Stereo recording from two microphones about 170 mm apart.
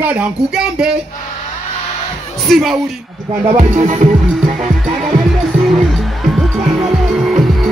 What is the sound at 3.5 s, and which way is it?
Music, 40° right (ahead or behind).